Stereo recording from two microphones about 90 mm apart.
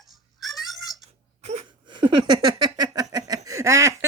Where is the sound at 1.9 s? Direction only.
60° right (ahead or behind).